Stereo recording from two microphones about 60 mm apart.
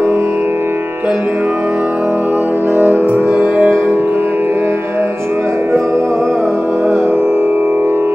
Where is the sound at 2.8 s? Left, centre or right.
Right.